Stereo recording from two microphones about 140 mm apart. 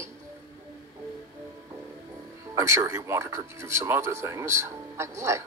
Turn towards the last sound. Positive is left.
turn(degrees=-20)  # may be behind; listen again after turning